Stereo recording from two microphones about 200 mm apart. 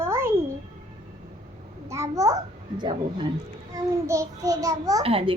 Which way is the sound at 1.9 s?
15° right (ahead or behind).